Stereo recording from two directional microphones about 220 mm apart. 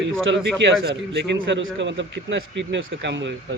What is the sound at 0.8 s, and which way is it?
Speech, 50° right (ahead or behind).